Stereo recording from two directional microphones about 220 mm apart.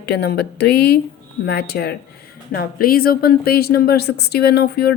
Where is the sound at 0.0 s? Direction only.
45° left (ahead or behind).